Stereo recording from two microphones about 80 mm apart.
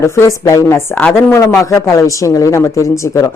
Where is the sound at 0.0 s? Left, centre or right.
Left.